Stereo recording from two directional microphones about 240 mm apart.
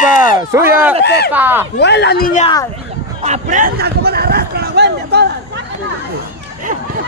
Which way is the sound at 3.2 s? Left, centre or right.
Right.